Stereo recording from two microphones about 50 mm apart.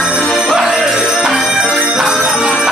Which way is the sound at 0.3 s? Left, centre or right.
Centre.